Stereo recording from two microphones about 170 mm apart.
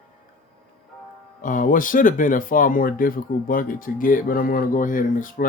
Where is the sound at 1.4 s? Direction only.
50° left (ahead or behind).